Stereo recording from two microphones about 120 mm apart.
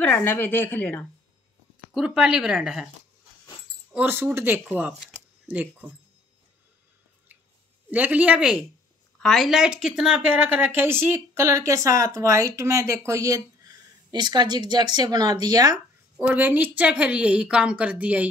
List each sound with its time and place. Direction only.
0.0 s speech: 15° left (ahead or behind)
2.0 s speech: 5° right (ahead or behind)
3.9 s a woman's voice: 15° right (ahead or behind)
7.9 s a woman's voice: 10° right (ahead or behind); by 15.8 s 35° right (ahead or behind)
16.2 s a woman's voice: 15° right (ahead or behind)